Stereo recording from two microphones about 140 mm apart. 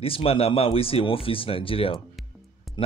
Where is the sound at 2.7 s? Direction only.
Centre (ahead or behind).